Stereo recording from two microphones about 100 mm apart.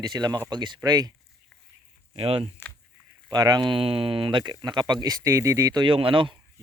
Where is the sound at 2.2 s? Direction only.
70° right (ahead or behind).